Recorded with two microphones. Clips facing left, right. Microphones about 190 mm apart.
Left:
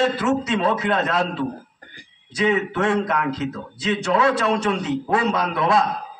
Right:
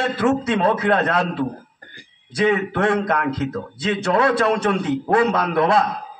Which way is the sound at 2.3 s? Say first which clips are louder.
Right 2 dB; 55° right (ahead or behind).